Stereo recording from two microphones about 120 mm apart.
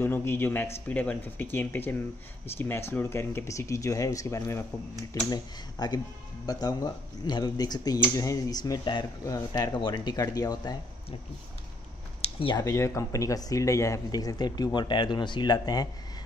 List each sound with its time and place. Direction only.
0.0 s speech: 20° left (ahead or behind)
5.3 s speech: 35° left (ahead or behind)
12.2 s a sound: 50° left (ahead or behind)
12.5 s speech: 25° left (ahead or behind)